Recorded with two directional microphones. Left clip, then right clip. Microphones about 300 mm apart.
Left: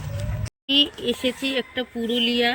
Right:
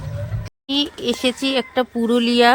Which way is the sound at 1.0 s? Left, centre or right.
Centre.